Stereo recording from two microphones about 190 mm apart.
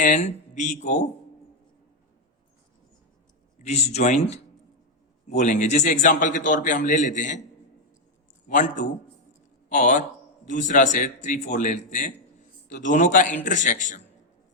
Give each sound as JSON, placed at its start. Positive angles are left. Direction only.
{"t": 0.0, "sound": "a man's voice", "side_deg": 40}
{"t": 3.6, "sound": "a man's voice", "side_deg": 35}
{"t": 8.4, "sound": "a man's voice", "side_deg": 40}